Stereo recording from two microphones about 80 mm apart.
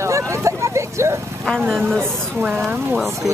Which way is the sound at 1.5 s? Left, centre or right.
Centre.